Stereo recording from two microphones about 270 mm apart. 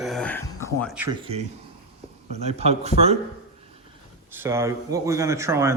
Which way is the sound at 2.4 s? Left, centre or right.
Right.